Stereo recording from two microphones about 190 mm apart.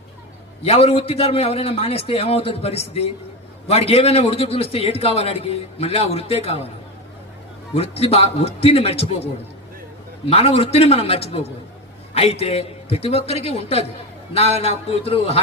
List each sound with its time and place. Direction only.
0.6 s a man's voice: 30° left (ahead or behind)
7.8 s a man's voice: 30° left (ahead or behind)